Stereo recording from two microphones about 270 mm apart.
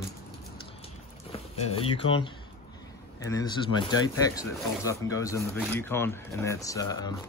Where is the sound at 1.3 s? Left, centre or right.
Left.